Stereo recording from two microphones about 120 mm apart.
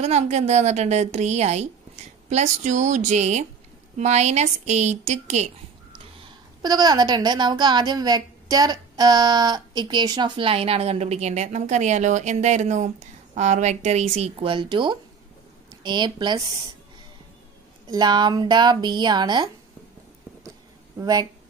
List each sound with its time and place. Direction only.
0.0 s a woman's voice: 65° right (ahead or behind)
2.2 s a woman's voice: 80° right
6.6 s a woman's voice: 35° right (ahead or behind); by 14.5 s 60° right (ahead or behind)
14.5 s a woman's voice: 45° right (ahead or behind)
17.8 s speech: 35° right (ahead or behind)
21.0 s speech: 35° right (ahead or behind)